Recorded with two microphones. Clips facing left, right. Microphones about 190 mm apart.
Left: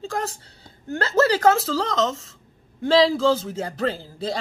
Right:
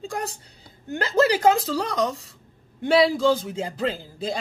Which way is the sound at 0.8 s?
15° right (ahead or behind).